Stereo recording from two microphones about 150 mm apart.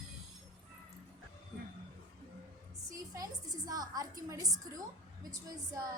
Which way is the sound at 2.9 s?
25° right (ahead or behind).